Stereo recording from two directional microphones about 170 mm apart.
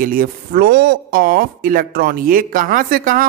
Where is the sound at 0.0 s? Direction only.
55° right (ahead or behind).